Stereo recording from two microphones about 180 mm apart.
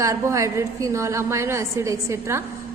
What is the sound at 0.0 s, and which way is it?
A woman's voice, 15° right (ahead or behind).